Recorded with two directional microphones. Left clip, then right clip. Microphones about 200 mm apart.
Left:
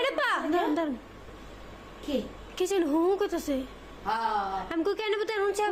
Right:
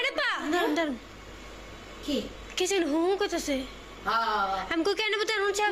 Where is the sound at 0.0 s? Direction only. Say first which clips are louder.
Left 1 dB; 15° left (ahead or behind).